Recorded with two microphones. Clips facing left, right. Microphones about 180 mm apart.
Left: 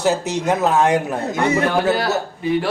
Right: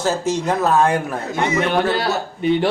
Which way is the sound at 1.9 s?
25° right (ahead or behind).